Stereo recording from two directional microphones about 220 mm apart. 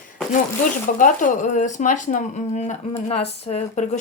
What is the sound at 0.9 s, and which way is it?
Speech, 40° left (ahead or behind).